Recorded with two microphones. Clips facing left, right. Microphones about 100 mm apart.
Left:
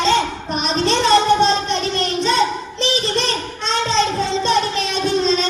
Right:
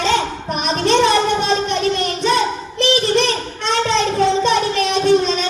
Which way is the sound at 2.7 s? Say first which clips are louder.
Right 7 dB; 60° right (ahead or behind).